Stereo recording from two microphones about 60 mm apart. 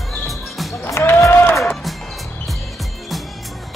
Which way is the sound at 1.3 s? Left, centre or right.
Left.